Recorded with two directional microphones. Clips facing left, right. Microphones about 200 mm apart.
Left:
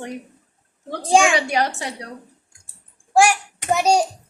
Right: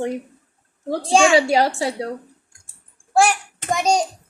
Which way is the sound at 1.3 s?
30° right (ahead or behind).